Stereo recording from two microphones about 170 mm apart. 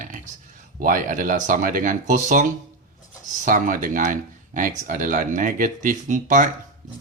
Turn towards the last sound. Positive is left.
turn(degrees=-50)  # may be behind; listen again after turning